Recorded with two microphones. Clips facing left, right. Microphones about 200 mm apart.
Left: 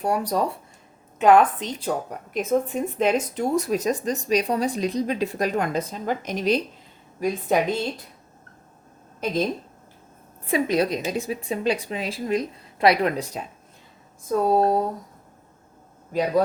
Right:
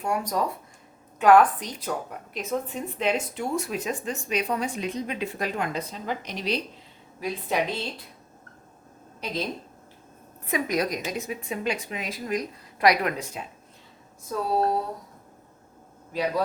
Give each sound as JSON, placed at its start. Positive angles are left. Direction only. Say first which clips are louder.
{"t": 0.0, "sound": "a woman's voice", "louder": "left 3 dB", "side_deg": 35}
{"t": 3.0, "sound": "a woman's voice", "louder": "left 4 dB", "side_deg": 40}
{"t": 9.2, "sound": "a woman's voice", "louder": "left 7 dB", "side_deg": 50}
{"t": 10.4, "sound": "a woman's voice", "louder": "left 5 dB", "side_deg": 30}
{"t": 14.3, "sound": "a woman's voice", "louder": "left 5 dB", "side_deg": 50}